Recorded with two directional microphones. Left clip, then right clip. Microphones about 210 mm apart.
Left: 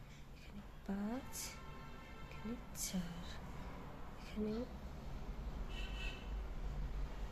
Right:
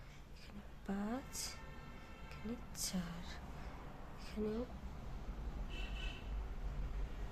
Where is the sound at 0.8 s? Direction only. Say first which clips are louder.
Right 1 dB; 15° right (ahead or behind).